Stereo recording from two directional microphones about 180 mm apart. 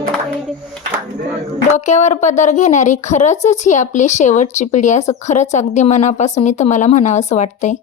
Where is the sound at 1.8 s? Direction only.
40° left (ahead or behind).